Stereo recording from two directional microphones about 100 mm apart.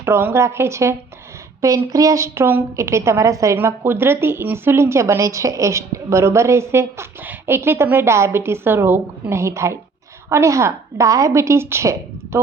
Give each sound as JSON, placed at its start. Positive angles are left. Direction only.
{"t": 0.0, "sound": "a woman's voice", "side_deg": -25}